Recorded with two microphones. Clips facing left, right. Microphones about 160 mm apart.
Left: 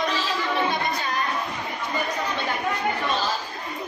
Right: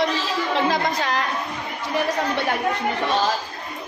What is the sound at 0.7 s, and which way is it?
Speech, 90° right.